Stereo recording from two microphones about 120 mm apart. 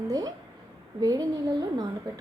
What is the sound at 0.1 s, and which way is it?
A woman's voice, 30° right (ahead or behind).